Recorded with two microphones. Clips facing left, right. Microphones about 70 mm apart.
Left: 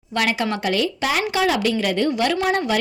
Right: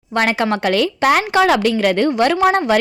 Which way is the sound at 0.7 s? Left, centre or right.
Right.